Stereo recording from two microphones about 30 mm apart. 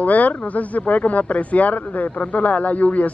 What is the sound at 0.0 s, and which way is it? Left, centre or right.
Speech, left.